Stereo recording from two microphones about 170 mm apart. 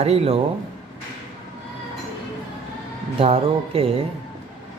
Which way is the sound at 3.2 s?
35° right (ahead or behind).